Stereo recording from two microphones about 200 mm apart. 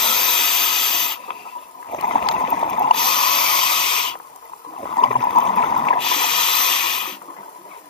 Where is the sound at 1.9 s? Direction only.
25° left (ahead or behind).